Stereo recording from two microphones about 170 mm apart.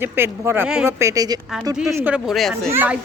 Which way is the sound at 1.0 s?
20° right (ahead or behind).